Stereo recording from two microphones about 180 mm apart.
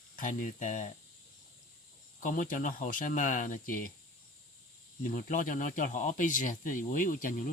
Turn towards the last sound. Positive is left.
turn(degrees=45)  # may be behind; listen again after turning